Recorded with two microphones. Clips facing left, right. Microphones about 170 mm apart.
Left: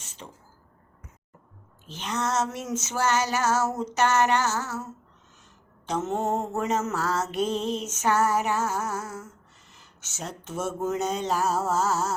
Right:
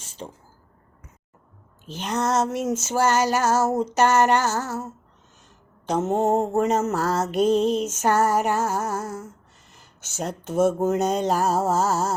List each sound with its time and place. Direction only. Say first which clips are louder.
0.2 s a sound: right 7 dB; 30° right (ahead or behind)
1.9 s music: right 5 dB; 40° right (ahead or behind)
5.8 s mantra: right 6 dB; 45° right (ahead or behind)
6.8 s music: right 4 dB; 40° right (ahead or behind)
9.7 s speech: right 9 dB; 40° right (ahead or behind)
10.8 s music: right 6 dB; 50° right (ahead or behind); by 12.1 s 35° right (ahead or behind)